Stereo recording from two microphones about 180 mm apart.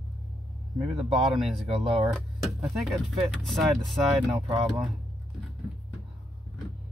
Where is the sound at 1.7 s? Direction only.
30° right (ahead or behind).